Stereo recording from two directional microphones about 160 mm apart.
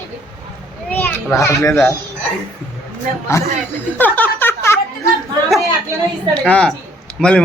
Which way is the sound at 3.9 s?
10° left (ahead or behind).